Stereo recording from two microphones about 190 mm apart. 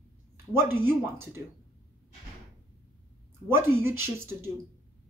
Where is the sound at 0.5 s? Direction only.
10° right (ahead or behind).